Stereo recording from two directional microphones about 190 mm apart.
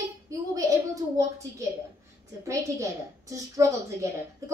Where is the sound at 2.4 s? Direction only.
15° right (ahead or behind).